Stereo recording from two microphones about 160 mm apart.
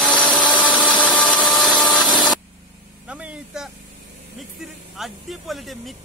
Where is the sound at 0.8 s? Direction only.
30° left (ahead or behind).